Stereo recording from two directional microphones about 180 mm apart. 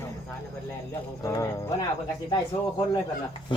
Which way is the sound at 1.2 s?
20° left (ahead or behind).